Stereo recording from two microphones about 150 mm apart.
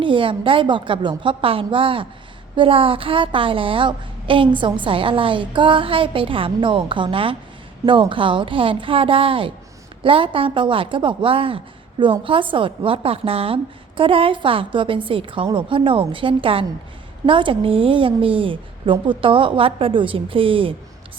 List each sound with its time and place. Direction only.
0.0 s a woman's voice: 35° right (ahead or behind)